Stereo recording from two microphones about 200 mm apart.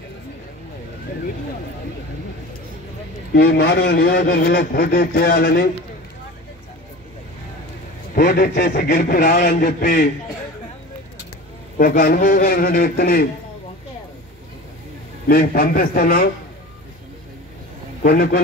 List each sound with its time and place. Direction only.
3.3 s a man's voice: 50° left (ahead or behind)
8.1 s a man's voice: 50° left (ahead or behind)
11.8 s a man's voice: 45° left (ahead or behind)
15.2 s a man's voice: 45° left (ahead or behind)
18.0 s a man's voice: 50° left (ahead or behind)